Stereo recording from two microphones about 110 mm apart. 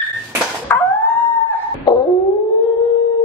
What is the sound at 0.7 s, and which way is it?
Dog, 20° left (ahead or behind).